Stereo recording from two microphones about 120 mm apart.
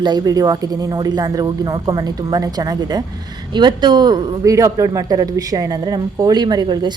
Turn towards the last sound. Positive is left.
turn(degrees=-40)  # may be behind; listen again after turning